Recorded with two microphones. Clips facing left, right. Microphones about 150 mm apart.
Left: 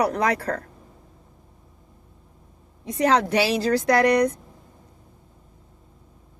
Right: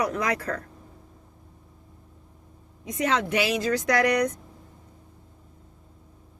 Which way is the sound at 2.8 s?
35° left (ahead or behind).